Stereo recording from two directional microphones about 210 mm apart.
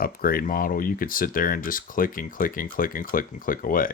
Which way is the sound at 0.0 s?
45° left (ahead or behind).